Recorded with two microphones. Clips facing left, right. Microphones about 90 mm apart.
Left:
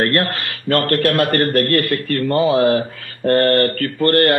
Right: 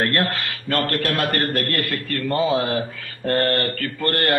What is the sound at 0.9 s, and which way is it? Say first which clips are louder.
Speech: left 6 dB; 45° left (ahead or behind).